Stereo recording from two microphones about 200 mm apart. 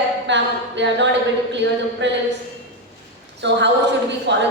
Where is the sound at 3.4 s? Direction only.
60° right (ahead or behind).